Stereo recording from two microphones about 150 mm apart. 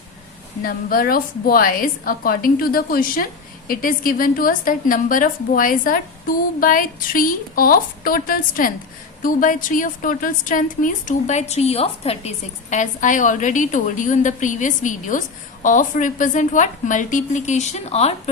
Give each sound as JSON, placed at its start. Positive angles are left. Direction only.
{"t": 0.6, "sound": "a woman's voice", "side_deg": 75}
{"t": 12.7, "sound": "a woman's voice", "side_deg": 55}